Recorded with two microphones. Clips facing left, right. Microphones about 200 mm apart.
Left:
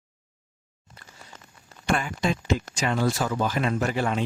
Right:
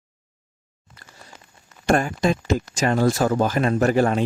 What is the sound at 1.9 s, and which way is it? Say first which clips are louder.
Speech: right 6 dB; 45° right (ahead or behind).